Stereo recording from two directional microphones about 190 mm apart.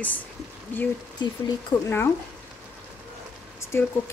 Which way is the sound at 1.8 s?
10° left (ahead or behind).